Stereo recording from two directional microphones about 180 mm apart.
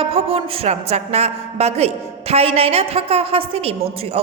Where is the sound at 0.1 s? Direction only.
30° right (ahead or behind).